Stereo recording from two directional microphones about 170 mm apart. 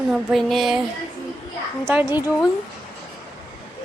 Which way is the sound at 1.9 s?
10° right (ahead or behind).